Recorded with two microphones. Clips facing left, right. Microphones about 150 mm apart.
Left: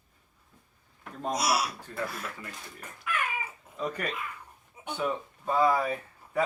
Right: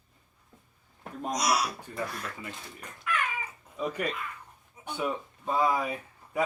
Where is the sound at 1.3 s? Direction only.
5° left (ahead or behind).